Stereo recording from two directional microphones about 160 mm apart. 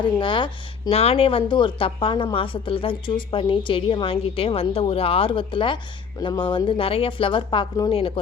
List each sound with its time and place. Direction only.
0.2 s speech: 30° left (ahead or behind)